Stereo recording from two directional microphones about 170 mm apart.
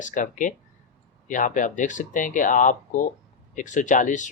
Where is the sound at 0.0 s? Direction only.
50° left (ahead or behind).